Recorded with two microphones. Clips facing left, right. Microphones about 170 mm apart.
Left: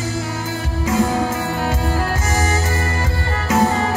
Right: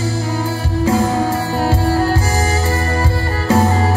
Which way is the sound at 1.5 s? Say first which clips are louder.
Right 5 dB; 35° right (ahead or behind).